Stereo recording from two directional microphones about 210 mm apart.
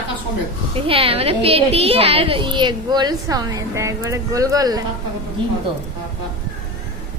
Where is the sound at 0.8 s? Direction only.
25° right (ahead or behind).